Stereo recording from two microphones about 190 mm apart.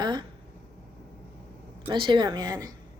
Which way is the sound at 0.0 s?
25° right (ahead or behind).